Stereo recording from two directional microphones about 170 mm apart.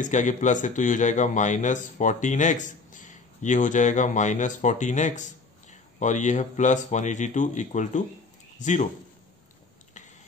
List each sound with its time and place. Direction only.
0.0 s a man's voice: 50° left (ahead or behind)